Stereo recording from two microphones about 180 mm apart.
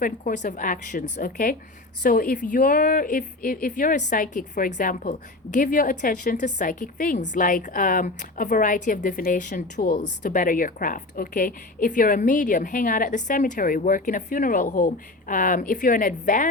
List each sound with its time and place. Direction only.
0.0 s a woman's voice: 50° left (ahead or behind)